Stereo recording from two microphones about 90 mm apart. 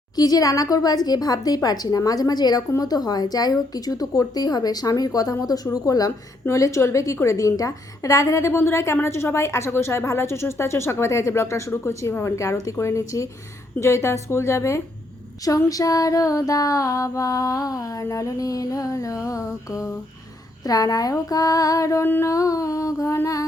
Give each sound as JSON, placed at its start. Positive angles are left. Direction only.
{"t": 0.2, "sound": "a woman's voice", "side_deg": 45}
{"t": 22.0, "sound": "child singing", "side_deg": 25}
{"t": 22.3, "sound": "a woman's voice", "side_deg": 40}